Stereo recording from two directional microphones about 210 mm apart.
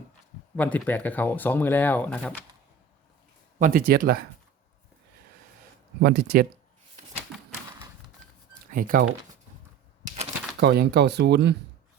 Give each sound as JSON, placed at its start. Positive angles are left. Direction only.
{"t": 0.5, "sound": "speech", "side_deg": 5}
{"t": 3.6, "sound": "speech", "side_deg": -40}
{"t": 6.0, "sound": "speech", "side_deg": -45}
{"t": 8.7, "sound": "speech", "side_deg": -40}
{"t": 10.6, "sound": "speech", "side_deg": -50}